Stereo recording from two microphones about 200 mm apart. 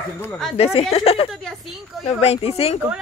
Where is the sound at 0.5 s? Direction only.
30° left (ahead or behind).